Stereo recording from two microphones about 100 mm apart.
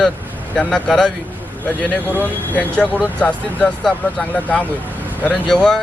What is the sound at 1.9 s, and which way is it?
A man's voice, 15° left (ahead or behind).